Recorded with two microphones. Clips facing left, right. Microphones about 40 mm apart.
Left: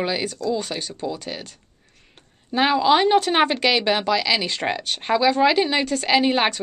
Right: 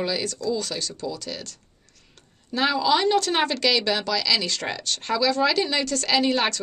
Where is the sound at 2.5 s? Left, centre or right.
Left.